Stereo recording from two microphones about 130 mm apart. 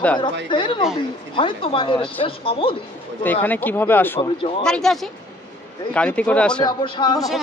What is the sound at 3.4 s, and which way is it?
Speech, 15° left (ahead or behind).